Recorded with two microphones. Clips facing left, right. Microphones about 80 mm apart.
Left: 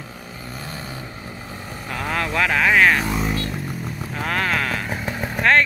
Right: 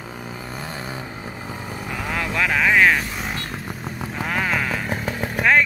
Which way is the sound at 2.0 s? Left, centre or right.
Centre.